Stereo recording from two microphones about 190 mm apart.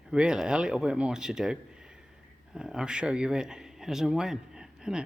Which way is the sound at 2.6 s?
5° right (ahead or behind).